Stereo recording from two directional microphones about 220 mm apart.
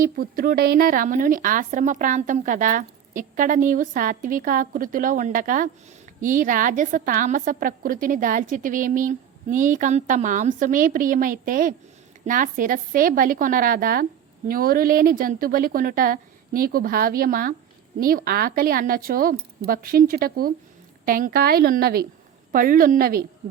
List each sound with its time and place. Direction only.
0.0 s a woman's voice: 40° right (ahead or behind)